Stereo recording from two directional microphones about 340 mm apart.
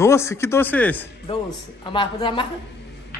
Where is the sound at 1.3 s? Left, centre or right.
Centre.